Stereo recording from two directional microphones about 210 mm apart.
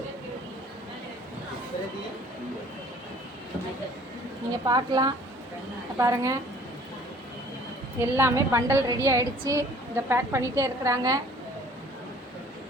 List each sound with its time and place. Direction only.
4.6 s a woman's voice: 20° right (ahead or behind)
8.1 s a woman's voice: 15° right (ahead or behind)